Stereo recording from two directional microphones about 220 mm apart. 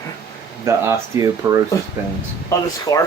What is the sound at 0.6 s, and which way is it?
Speech, 15° right (ahead or behind).